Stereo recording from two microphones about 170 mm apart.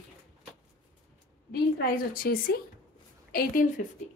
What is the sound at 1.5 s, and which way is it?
A woman's voice, 70° left (ahead or behind).